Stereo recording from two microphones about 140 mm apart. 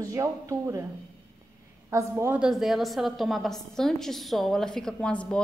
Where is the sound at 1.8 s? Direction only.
20° right (ahead or behind).